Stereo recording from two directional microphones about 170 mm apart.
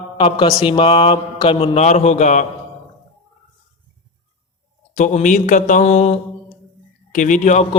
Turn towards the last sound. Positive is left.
turn(degrees=45)  # may be behind; listen again after turning